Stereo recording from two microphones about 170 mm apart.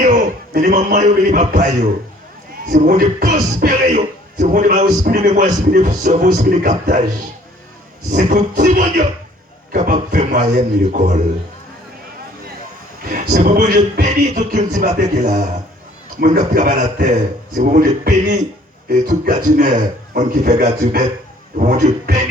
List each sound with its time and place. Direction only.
0.0 s a man's voice: 50° right (ahead or behind)
8.1 s a man's voice: 50° right (ahead or behind)
13.1 s a man's voice: 50° right (ahead or behind)